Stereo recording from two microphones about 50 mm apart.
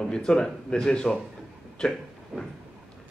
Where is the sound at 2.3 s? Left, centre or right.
Centre.